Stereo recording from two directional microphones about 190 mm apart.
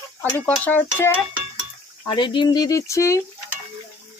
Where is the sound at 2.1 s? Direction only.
25° left (ahead or behind).